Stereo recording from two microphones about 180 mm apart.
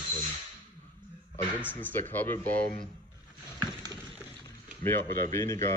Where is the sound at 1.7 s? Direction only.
10° left (ahead or behind).